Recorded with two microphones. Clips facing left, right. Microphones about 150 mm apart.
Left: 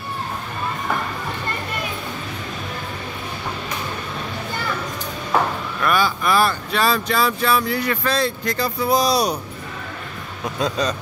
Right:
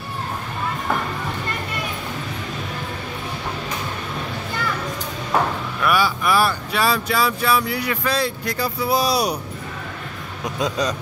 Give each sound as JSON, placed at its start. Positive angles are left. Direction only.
{"t": 5.9, "sound": "speech", "side_deg": -10}
{"t": 10.4, "sound": "speech", "side_deg": -15}